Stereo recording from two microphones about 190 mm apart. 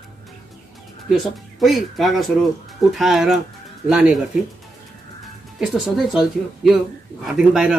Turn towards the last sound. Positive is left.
turn(degrees=0)  # may be behind; listen again after turning